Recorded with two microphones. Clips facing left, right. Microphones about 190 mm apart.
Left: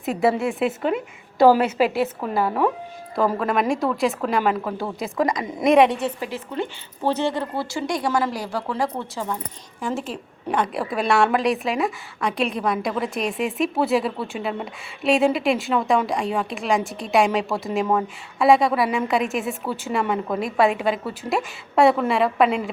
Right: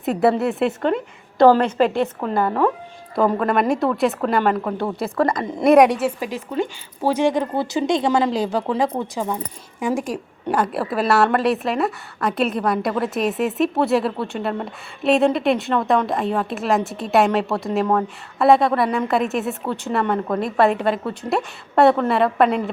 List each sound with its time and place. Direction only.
0.0 s a woman's voice: centre (ahead or behind)